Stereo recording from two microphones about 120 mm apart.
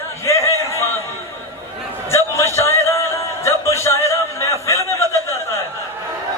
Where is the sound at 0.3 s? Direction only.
25° left (ahead or behind).